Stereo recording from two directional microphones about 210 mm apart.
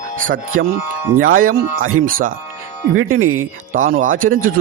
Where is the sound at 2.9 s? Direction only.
80° right.